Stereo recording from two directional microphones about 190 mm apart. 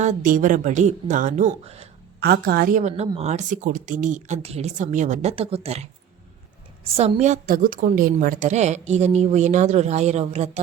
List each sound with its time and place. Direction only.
0.0 s a woman's voice: 40° right (ahead or behind)
2.2 s a woman's voice: 55° right (ahead or behind); by 10.6 s 35° right (ahead or behind)